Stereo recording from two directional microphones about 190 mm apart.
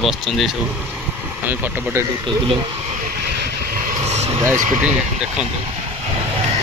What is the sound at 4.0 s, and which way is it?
Vehicle, 35° right (ahead or behind).